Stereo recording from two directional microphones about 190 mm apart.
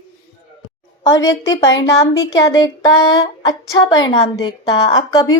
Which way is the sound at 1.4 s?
20° left (ahead or behind).